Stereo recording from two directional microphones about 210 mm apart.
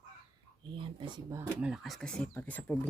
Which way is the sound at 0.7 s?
25° right (ahead or behind).